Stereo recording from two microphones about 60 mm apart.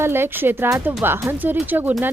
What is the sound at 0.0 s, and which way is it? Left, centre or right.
Speech, right.